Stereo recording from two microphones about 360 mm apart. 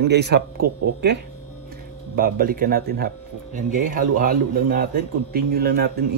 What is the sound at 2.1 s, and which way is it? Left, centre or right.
Speech, right.